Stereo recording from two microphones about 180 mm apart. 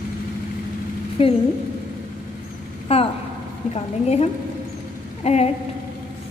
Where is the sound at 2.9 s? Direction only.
35° left (ahead or behind).